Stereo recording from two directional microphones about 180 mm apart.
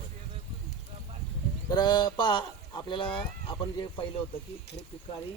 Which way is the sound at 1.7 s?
25° left (ahead or behind).